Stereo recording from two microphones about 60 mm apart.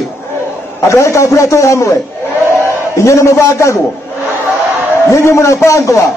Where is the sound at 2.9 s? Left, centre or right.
Left.